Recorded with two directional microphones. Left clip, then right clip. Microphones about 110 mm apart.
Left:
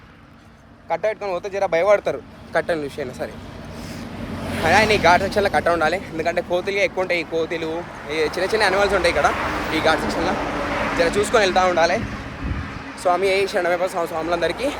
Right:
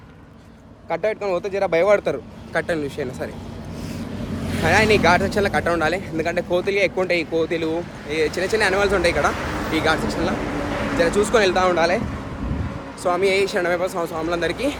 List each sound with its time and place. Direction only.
0.9 s speech: 40° right (ahead or behind)
2.5 s speech: 15° right (ahead or behind)
4.6 s speech: 30° right (ahead or behind)
5.4 s speech: 15° right (ahead or behind); by 7.8 s 35° right (ahead or behind)
8.1 s speech: 20° right (ahead or behind)
10.7 s vehicle: 45° left (ahead or behind)
10.9 s speech: 25° right (ahead or behind)
13.0 s speech: 25° right (ahead or behind)